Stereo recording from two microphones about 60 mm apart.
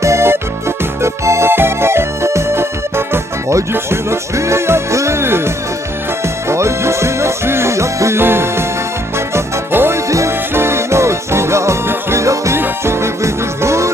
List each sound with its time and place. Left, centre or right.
0.0 s music: right
6.5 s music: right
8.2 s music: right
10.1 s music: right
10.5 s music: right
12.5 s music: right